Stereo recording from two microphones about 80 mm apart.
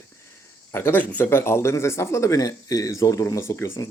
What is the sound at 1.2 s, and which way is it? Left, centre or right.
Speech, left.